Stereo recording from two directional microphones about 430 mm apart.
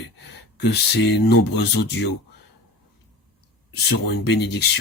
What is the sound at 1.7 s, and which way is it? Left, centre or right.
Speech, left.